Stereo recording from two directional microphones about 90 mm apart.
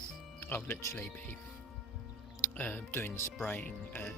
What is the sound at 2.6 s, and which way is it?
Speech, 20° left (ahead or behind).